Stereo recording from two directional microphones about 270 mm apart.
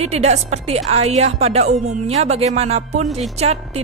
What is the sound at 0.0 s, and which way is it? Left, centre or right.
A woman's voice, right.